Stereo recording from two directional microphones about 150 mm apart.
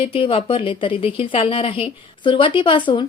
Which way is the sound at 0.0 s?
35° left (ahead or behind).